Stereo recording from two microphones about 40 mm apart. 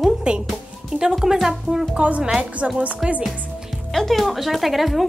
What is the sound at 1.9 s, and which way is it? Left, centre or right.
Speech, right.